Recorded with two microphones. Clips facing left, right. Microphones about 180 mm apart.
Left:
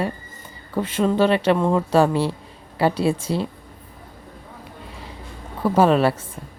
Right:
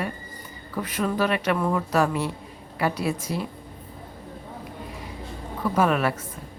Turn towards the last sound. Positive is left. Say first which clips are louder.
# left 6 dB
turn(degrees=30)  # may be behind; listen again after turning